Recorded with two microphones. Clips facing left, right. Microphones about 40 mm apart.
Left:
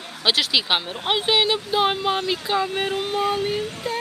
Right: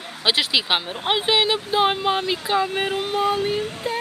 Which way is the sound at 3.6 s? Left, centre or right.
Right.